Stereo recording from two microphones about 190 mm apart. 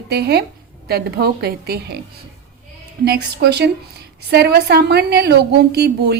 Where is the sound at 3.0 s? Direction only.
60° right (ahead or behind).